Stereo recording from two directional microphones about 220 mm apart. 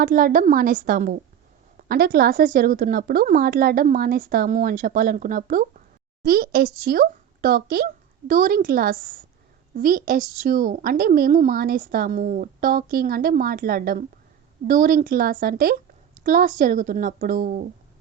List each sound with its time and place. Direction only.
0.0 s a woman's voice: 40° right (ahead or behind)